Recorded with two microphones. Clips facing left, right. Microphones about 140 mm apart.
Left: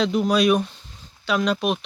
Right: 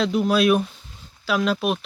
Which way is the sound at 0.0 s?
Centre (ahead or behind).